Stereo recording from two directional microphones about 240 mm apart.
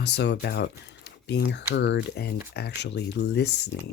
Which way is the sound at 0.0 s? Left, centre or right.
Left.